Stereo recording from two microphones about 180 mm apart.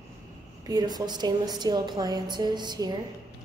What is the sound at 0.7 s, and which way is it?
A woman's voice, 20° right (ahead or behind).